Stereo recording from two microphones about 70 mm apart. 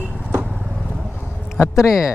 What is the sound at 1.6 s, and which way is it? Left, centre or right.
Speech, left.